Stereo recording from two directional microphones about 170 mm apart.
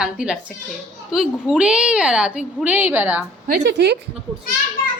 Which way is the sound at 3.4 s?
70° right (ahead or behind).